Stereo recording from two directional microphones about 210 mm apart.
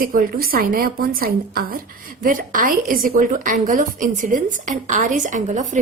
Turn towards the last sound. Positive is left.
turn(degrees=-35)  # may be behind; listen again after turning